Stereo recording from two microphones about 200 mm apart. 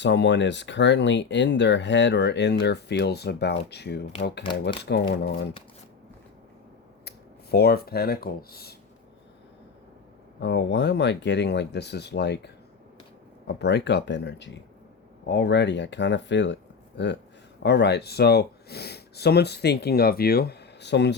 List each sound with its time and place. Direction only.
0.0 s speech: 60° left (ahead or behind)
7.5 s speech: 50° left (ahead or behind)
10.4 s speech: 60° left (ahead or behind)
13.6 s speech: 60° left (ahead or behind)